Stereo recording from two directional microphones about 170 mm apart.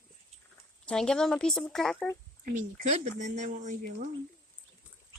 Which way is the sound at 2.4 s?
50° right (ahead or behind).